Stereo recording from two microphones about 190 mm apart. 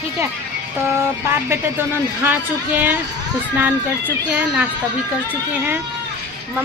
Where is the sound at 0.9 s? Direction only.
15° right (ahead or behind).